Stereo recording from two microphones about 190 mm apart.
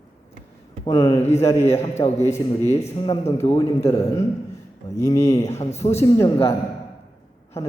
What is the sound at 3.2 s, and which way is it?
Speech, 15° left (ahead or behind).